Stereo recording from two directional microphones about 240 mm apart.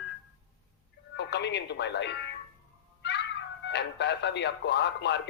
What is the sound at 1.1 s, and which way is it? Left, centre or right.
Speech, left.